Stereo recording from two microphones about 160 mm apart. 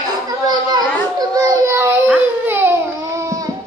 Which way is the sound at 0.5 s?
25° right (ahead or behind).